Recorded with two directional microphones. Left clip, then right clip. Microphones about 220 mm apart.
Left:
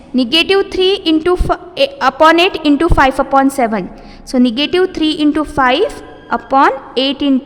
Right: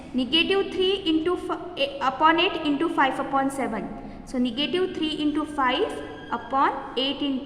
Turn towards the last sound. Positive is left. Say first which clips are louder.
# left 12 dB
turn(degrees=50)  # may be behind; listen again after turning